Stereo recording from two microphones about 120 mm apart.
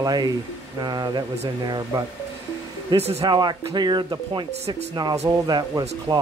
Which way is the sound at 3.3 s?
35° right (ahead or behind).